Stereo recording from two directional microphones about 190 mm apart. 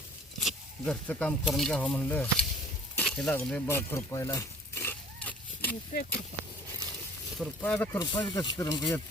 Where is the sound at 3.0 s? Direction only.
5° left (ahead or behind).